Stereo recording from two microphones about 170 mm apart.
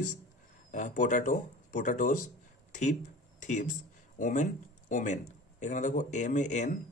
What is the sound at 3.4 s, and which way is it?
Speech, 45° left (ahead or behind).